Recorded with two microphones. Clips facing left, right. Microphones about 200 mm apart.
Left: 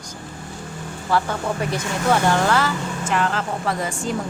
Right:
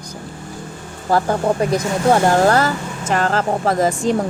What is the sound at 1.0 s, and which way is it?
Speech, 40° right (ahead or behind).